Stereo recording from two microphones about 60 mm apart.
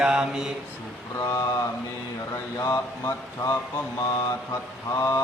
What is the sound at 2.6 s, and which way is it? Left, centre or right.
Speech, left.